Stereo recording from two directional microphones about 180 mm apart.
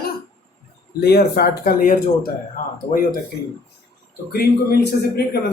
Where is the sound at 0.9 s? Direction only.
65° left (ahead or behind).